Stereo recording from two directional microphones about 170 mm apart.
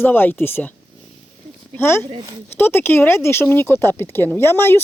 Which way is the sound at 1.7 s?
15° left (ahead or behind).